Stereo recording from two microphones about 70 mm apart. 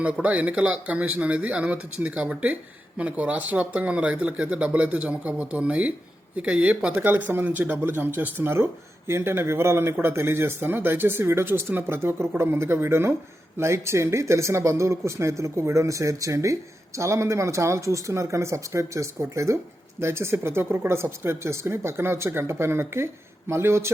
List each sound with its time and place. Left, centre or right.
0.0 s speech: centre; by 23.9 s right